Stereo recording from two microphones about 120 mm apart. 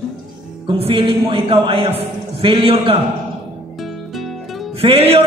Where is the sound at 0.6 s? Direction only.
45° right (ahead or behind).